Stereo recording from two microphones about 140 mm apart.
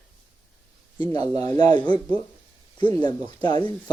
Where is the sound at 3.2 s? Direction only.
30° left (ahead or behind).